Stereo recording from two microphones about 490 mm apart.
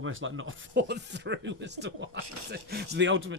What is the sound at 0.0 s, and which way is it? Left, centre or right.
A man's voice, right.